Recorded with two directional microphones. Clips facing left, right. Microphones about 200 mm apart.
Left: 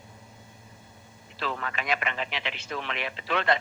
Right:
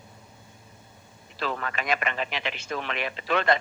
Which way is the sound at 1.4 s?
45° right (ahead or behind).